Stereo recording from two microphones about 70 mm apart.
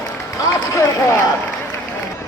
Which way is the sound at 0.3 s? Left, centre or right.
Left.